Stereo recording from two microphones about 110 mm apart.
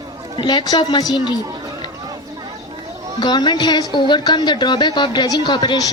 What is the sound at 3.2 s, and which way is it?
A woman's voice, 40° left (ahead or behind).